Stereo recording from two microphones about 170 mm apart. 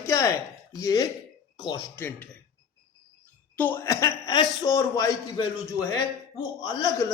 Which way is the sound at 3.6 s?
10° left (ahead or behind).